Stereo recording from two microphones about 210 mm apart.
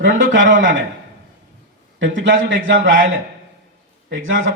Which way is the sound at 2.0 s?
60° right (ahead or behind).